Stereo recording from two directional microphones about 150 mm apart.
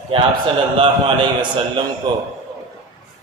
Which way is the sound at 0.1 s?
35° right (ahead or behind).